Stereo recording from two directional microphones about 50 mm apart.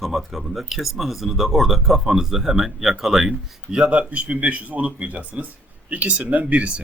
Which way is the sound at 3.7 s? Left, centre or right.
Right.